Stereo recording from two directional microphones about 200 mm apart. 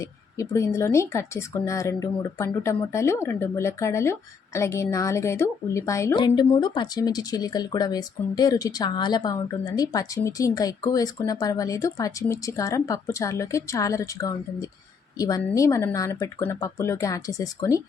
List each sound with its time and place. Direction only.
0.3 s speech: 15° left (ahead or behind)